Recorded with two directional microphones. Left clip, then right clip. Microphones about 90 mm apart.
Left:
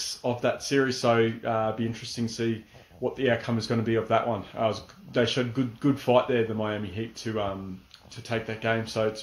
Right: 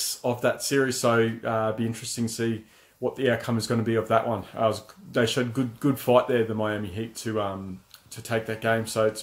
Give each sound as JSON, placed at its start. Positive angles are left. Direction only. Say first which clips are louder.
{"t": 0.1, "sound": "speech", "louder": "right 2 dB", "side_deg": -30}